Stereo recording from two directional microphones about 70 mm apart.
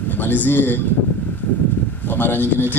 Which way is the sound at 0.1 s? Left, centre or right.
Left.